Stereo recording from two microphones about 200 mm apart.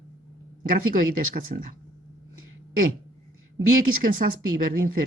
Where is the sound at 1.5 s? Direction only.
40° right (ahead or behind).